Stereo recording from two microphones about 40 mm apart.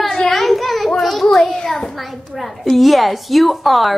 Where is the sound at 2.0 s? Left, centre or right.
Centre.